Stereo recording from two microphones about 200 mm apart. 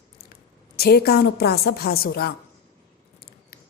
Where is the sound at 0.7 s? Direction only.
50° left (ahead or behind).